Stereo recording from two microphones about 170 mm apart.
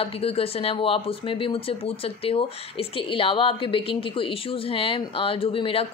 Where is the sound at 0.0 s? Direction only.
35° left (ahead or behind).